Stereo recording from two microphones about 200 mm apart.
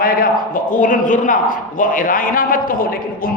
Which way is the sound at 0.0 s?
45° left (ahead or behind).